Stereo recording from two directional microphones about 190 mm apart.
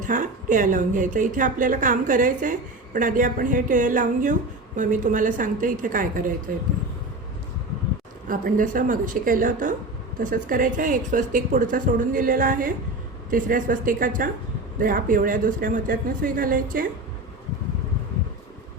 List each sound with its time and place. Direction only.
0.0 s speech: 45° right (ahead or behind)
8.3 s speech: 45° right (ahead or behind)